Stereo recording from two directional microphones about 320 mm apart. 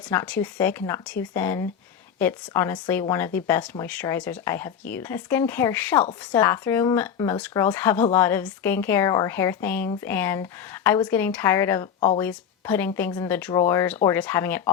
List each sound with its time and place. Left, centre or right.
0.1 s speech: centre
11.9 s speech: left
12.2 s speech: centre